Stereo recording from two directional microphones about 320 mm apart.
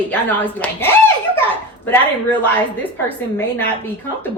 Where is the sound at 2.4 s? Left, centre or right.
Centre.